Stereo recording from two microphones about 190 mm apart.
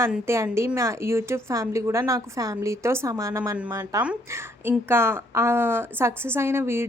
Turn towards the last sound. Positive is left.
turn(degrees=-15)  # may be behind; listen again after turning